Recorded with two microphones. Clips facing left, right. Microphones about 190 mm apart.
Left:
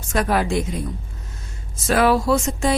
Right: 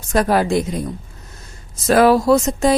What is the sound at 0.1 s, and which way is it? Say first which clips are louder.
A woman's voice: right 4 dB; 35° right (ahead or behind).